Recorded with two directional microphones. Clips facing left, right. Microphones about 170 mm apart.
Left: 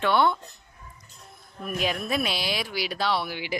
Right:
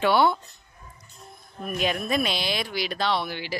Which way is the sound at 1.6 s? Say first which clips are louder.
Right 1 dB; centre (ahead or behind).